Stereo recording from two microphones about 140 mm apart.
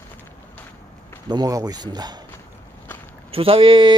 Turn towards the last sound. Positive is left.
turn(degrees=-40)  # may be behind; listen again after turning